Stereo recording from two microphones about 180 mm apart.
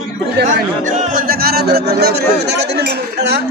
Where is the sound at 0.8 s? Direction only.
50° right (ahead or behind); by 3.4 s 70° right (ahead or behind).